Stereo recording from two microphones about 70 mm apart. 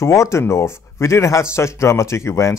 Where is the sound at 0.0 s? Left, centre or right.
Left.